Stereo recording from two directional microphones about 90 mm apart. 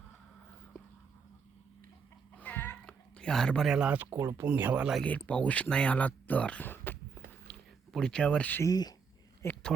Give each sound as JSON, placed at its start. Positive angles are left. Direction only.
{"t": 2.3, "sound": "music", "side_deg": 15}
{"t": 2.8, "sound": "a sound", "side_deg": 10}
{"t": 3.7, "sound": "speech", "side_deg": -15}
{"t": 4.1, "sound": "speech", "side_deg": -35}
{"t": 4.4, "sound": "speech", "side_deg": -20}
{"t": 5.0, "sound": "speech", "side_deg": 15}
{"t": 7.9, "sound": "speech", "side_deg": 10}
{"t": 8.6, "sound": "speech", "side_deg": 50}
{"t": 9.4, "sound": "a sound", "side_deg": 30}